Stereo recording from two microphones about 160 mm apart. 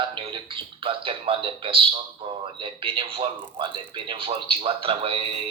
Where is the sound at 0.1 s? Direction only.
30° right (ahead or behind).